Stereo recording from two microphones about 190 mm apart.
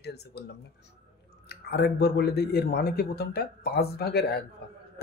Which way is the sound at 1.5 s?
60° left (ahead or behind).